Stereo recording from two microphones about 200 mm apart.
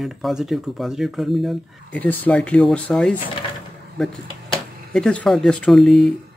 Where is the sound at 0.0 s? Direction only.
Centre (ahead or behind).